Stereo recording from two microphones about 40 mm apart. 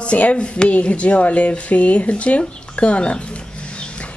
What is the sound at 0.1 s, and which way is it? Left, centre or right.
Speech, left.